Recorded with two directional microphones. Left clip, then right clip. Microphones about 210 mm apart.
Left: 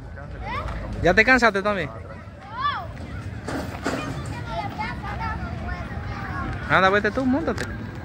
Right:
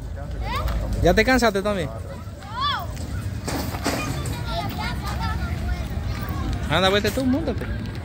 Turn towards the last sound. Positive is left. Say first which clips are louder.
# left 1 dB
turn(degrees=0)  # may be behind; listen again after turning